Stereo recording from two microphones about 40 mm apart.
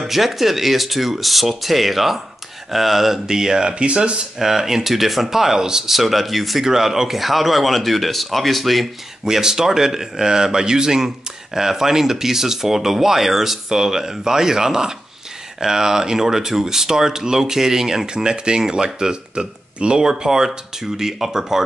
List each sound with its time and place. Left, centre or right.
0.0 s speech: centre
3.7 s speech: right
4.4 s speech: centre
5.9 s speech: centre
9.2 s speech: centre